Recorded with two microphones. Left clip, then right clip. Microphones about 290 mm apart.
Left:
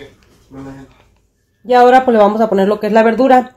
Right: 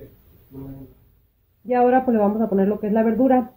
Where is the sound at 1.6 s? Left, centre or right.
Left.